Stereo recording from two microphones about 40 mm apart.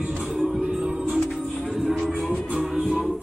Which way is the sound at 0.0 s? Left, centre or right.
Right.